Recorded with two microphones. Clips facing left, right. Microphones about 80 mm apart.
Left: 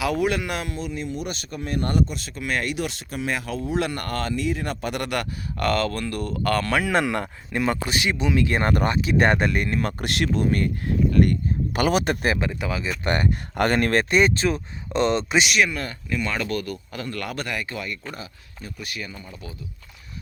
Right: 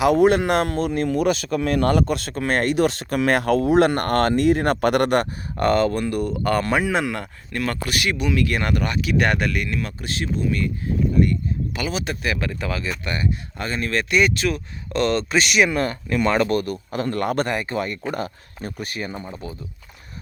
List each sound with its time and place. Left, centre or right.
0.0 s speech: right
2.0 s speech: right
5.2 s speech: right
6.9 s speech: centre
7.5 s speech: centre; by 9.9 s left
10.0 s speech: left
12.4 s speech: centre
13.1 s speech: left
14.0 s speech: left
15.7 s speech: right
16.4 s speech: right
16.9 s speech: right
18.1 s speech: right